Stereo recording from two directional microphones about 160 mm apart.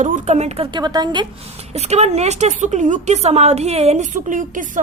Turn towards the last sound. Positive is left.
turn(degrees=-55)  # may be behind; listen again after turning